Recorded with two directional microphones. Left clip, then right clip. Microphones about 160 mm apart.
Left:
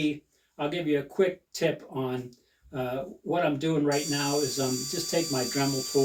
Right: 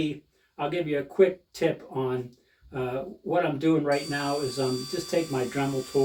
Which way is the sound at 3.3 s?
5° right (ahead or behind).